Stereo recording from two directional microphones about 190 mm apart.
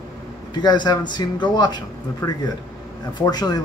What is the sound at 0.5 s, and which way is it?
Speech, 25° left (ahead or behind).